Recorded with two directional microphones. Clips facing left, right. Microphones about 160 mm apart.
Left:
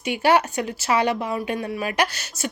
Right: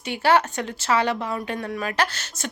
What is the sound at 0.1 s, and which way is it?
A woman's voice, 15° left (ahead or behind).